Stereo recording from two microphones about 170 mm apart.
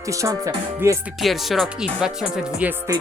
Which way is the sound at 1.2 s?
Centre (ahead or behind).